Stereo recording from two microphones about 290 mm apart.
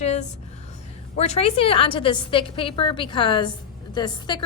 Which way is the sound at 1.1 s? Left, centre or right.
Left.